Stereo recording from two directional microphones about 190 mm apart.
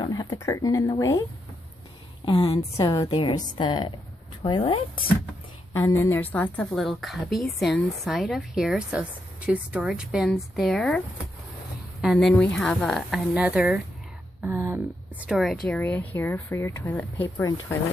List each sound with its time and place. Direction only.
0.0 s speech: 20° left (ahead or behind)
2.2 s a woman's voice: 25° left (ahead or behind); by 11.0 s 5° left (ahead or behind)
12.0 s a woman's voice: centre (ahead or behind)
15.2 s a woman's voice: 5° right (ahead or behind)